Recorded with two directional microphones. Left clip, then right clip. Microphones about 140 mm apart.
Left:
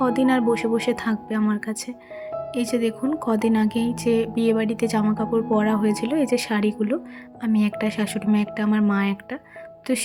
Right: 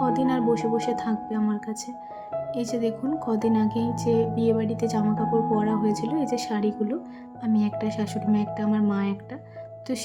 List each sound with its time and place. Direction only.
0.0 s speech: 25° left (ahead or behind)